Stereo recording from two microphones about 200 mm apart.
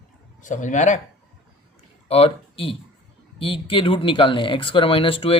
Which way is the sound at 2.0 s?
30° left (ahead or behind).